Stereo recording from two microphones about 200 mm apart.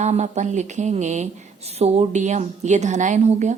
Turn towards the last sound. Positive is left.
turn(degrees=-35)  # may be behind; listen again after turning